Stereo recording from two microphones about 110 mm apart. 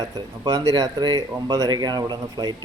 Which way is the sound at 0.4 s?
35° right (ahead or behind).